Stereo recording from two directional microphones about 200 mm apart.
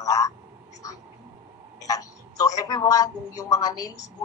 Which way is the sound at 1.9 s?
20° left (ahead or behind).